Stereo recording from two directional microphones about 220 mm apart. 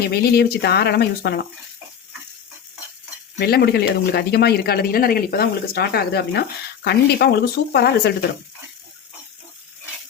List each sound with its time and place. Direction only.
0.1 s speech: 45° left (ahead or behind)
3.3 s speech: 45° left (ahead or behind)